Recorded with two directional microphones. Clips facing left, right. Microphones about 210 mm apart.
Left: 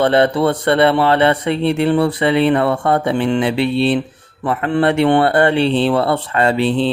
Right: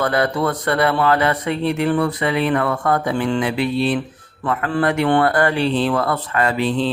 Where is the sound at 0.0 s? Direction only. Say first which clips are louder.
Left 5 dB; 30° left (ahead or behind).